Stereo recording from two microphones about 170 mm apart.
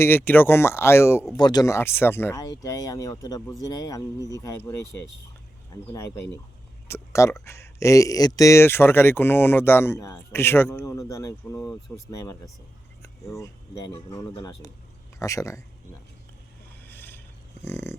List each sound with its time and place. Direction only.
0.0 s speech: 10° left (ahead or behind)
5.9 s speech: 20° left (ahead or behind)
13.4 s speech: 20° left (ahead or behind)
16.8 s a sound: 10° left (ahead or behind)
17.7 s speech: 15° left (ahead or behind)